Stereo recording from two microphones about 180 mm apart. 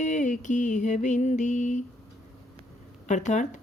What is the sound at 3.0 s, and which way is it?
Speech, 40° left (ahead or behind).